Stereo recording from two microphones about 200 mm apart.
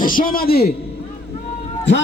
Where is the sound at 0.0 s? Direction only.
45° left (ahead or behind).